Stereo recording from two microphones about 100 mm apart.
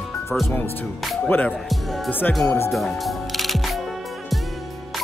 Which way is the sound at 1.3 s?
15° left (ahead or behind).